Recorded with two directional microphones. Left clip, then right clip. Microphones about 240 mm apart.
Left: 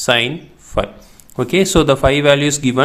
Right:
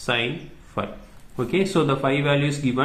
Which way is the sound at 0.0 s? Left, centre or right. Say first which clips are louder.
Left 9 dB; left.